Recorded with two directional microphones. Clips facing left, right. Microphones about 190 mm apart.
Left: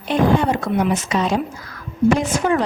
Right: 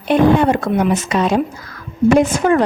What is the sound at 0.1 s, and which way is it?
A woman's voice, 60° right (ahead or behind).